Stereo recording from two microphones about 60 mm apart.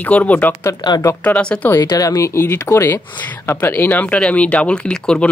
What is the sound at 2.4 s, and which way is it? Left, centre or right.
Speech, left.